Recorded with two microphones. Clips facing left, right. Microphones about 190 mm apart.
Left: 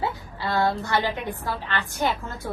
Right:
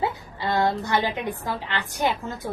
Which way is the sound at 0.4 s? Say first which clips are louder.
Right 1 dB; 20° right (ahead or behind).